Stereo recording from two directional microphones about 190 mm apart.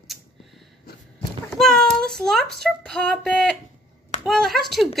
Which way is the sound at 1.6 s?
5° left (ahead or behind).